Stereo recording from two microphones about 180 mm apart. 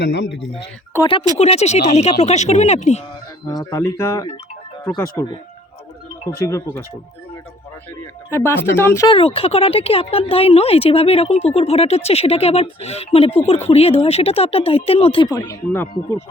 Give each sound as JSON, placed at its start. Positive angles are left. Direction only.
{"t": 0.0, "sound": "speech", "side_deg": 75}
{"t": 1.4, "sound": "speech", "side_deg": 35}
{"t": 3.4, "sound": "speech", "side_deg": 20}
{"t": 8.3, "sound": "speech", "side_deg": 10}
{"t": 9.0, "sound": "speech", "side_deg": 30}
{"t": 15.4, "sound": "speech", "side_deg": 15}